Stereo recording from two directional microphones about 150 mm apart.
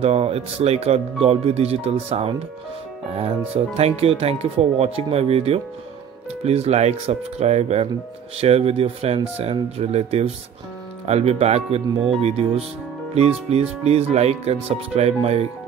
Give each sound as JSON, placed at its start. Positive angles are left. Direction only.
{"t": 0.0, "sound": "speech", "side_deg": -40}